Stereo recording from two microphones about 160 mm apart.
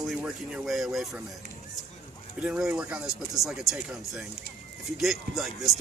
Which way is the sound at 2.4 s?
5° right (ahead or behind).